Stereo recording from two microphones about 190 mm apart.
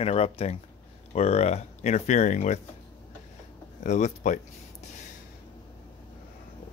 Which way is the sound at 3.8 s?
40° left (ahead or behind).